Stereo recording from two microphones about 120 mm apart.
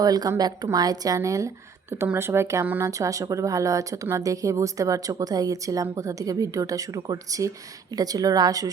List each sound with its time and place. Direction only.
0.0 s speech: 30° right (ahead or behind)